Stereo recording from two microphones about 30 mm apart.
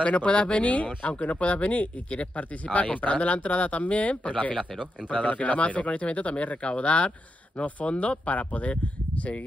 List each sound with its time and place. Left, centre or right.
0.0 s speech: left
8.3 s speech: left